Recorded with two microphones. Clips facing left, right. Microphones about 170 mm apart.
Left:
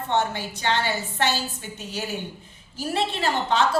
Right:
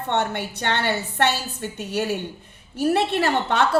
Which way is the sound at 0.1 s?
65° right (ahead or behind).